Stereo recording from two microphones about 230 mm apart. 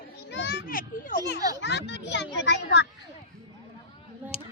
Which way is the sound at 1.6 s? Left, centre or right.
Left.